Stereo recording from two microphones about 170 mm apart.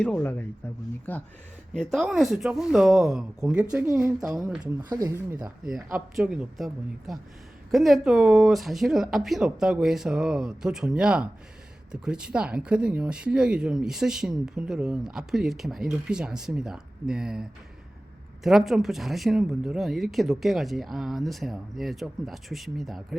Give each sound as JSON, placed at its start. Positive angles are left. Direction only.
{"t": 0.0, "sound": "speech", "side_deg": 10}
{"t": 4.6, "sound": "speech", "side_deg": -25}
{"t": 5.6, "sound": "speech", "side_deg": 0}